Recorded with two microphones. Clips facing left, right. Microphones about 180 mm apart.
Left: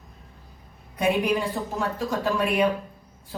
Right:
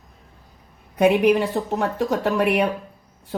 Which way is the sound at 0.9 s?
70° right (ahead or behind).